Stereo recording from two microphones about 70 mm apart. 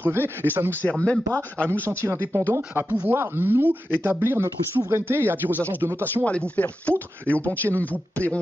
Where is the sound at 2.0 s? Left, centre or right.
Right.